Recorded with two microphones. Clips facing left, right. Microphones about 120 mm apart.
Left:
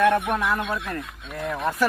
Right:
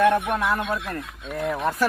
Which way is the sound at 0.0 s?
Centre (ahead or behind).